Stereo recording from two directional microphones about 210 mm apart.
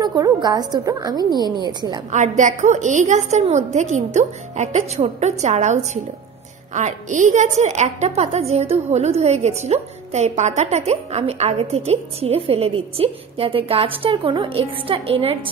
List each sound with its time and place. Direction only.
0.0 s a woman's voice: 20° right (ahead or behind)
2.0 s a woman's voice: 35° right (ahead or behind)